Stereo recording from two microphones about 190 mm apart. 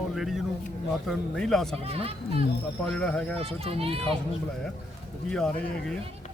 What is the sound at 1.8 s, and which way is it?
Speech, 30° right (ahead or behind).